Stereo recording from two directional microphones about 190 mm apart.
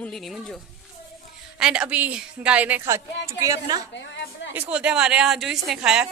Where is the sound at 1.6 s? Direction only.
5° right (ahead or behind).